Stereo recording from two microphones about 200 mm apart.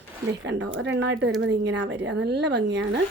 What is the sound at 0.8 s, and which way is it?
Speech, 60° right (ahead or behind).